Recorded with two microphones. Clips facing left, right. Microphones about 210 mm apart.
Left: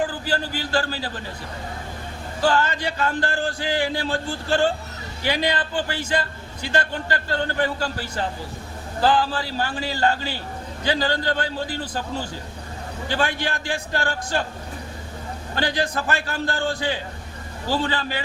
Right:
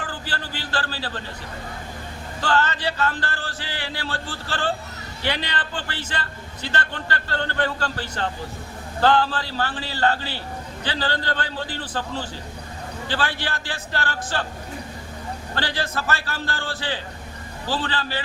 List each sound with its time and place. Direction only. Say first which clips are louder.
0.1 s a man's voice: left 6 dB; 10° left (ahead or behind)
2.4 s a man's voice: left 2 dB; 10° left (ahead or behind)
13.1 s a man's voice: left 3 dB; 15° left (ahead or behind)
15.5 s a man's voice: left 4 dB; 15° left (ahead or behind)